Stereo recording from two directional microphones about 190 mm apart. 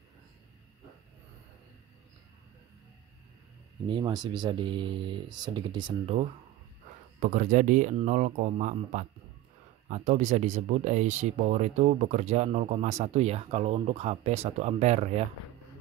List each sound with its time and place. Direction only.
3.9 s speech: 25° right (ahead or behind)
7.2 s speech: 40° right (ahead or behind)